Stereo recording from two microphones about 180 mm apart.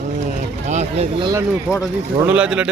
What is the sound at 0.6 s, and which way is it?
Vehicle, 40° right (ahead or behind).